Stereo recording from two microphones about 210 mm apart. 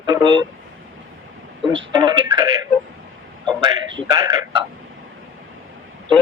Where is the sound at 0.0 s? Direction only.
20° right (ahead or behind).